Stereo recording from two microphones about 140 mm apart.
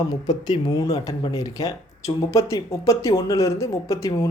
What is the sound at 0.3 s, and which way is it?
Speech, 30° left (ahead or behind).